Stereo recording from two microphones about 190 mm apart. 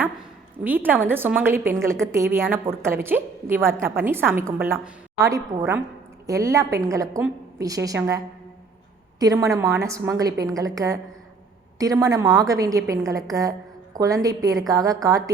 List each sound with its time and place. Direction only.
0.6 s a woman's voice: 10° right (ahead or behind)